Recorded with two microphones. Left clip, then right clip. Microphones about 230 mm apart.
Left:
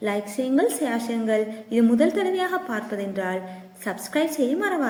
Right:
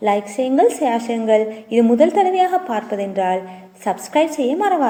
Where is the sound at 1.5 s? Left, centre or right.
Centre.